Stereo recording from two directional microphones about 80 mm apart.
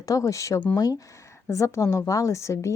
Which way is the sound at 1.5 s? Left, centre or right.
Left.